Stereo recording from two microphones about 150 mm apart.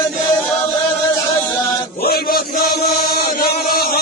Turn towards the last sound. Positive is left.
turn(degrees=85)